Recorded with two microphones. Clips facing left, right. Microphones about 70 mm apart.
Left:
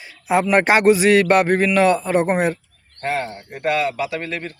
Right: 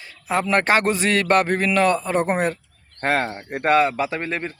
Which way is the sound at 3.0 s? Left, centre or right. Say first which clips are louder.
Right 2 dB; right.